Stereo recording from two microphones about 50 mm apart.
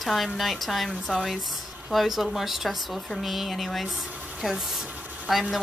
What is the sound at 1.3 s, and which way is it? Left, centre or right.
A woman's voice, centre.